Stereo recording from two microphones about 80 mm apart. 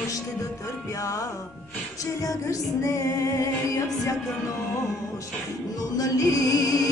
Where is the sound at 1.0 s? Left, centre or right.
Left.